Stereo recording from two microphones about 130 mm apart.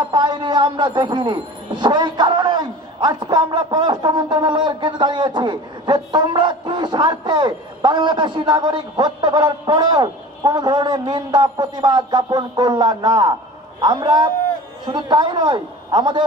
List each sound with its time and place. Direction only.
0.1 s speech: 35° right (ahead or behind)